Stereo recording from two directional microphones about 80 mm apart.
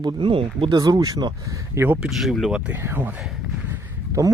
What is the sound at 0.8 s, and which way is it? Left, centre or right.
Speech, right.